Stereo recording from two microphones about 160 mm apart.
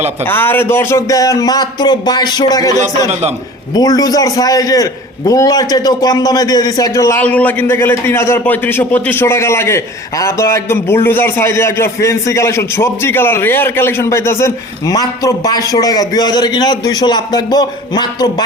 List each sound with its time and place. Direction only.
0.3 s a man's voice: 15° left (ahead or behind)
3.1 s a man's voice: 45° right (ahead or behind)
3.8 s a man's voice: 25° left (ahead or behind)